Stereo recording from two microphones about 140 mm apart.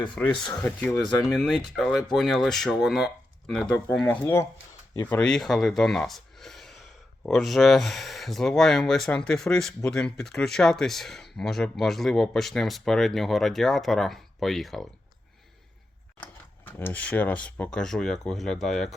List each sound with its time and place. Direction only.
0.2 s speech: 15° left (ahead or behind)
4.2 s speech: 15° left (ahead or behind)
16.2 s speech: 15° left (ahead or behind)